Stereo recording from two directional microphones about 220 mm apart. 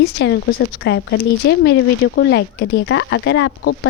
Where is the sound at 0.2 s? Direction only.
55° left (ahead or behind).